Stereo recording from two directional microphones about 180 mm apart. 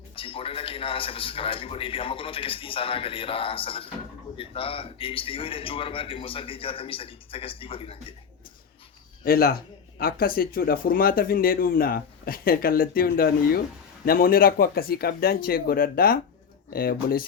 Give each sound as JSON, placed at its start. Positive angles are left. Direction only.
{"t": 0.2, "sound": "a man's voice", "side_deg": 30}
{"t": 9.2, "sound": "speech", "side_deg": 55}